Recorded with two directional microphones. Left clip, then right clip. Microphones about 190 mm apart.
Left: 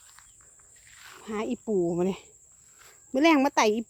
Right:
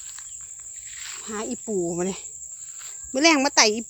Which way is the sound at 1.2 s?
20° left (ahead or behind).